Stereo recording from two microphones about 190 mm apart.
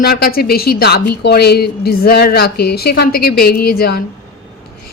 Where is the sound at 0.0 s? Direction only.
50° left (ahead or behind).